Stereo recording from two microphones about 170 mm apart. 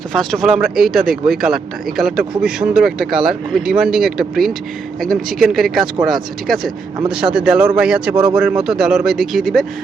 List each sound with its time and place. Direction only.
0.1 s speech: centre (ahead or behind)
7.3 s speech: 5° right (ahead or behind)
8.1 s speech: 30° right (ahead or behind)
8.4 s speech: 5° right (ahead or behind)